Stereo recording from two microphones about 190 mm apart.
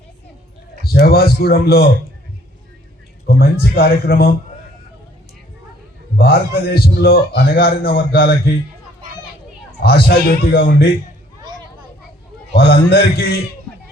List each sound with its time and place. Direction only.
0.9 s a man's voice: 55° left (ahead or behind)
3.2 s a man's voice: 55° left (ahead or behind)
6.1 s a man's voice: 55° left (ahead or behind)
9.8 s a man's voice: 55° left (ahead or behind)
12.5 s a man's voice: 55° left (ahead or behind)